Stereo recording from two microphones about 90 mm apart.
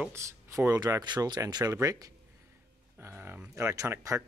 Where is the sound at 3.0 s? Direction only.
25° right (ahead or behind).